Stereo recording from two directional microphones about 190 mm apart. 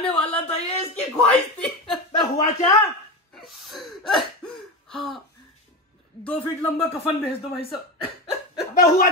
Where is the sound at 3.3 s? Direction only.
Centre (ahead or behind).